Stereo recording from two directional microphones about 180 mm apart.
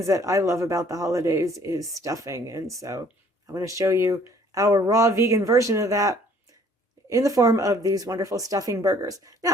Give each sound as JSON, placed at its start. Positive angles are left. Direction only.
{"t": 0.0, "sound": "speech", "side_deg": -20}